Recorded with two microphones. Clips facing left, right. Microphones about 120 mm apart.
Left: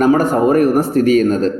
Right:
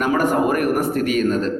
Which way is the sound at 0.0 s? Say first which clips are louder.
Left 6 dB; 30° left (ahead or behind).